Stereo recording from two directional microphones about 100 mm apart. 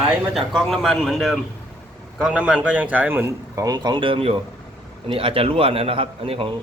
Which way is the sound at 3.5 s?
40° right (ahead or behind).